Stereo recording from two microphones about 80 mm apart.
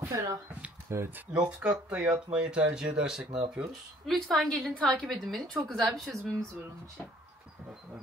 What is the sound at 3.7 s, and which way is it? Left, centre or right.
A woman's voice, centre.